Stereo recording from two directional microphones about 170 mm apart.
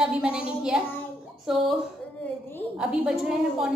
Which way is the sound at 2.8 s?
5° right (ahead or behind).